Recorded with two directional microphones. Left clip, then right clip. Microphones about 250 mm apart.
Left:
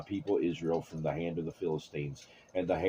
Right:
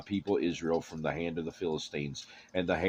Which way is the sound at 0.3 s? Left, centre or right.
Right.